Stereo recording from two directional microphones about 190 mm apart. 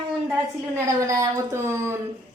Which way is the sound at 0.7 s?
15° right (ahead or behind).